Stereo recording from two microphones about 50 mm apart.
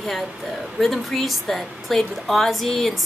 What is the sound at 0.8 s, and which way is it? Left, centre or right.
A woman's voice, centre.